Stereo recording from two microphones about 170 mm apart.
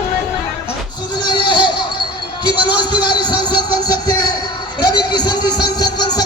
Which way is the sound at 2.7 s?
25° left (ahead or behind).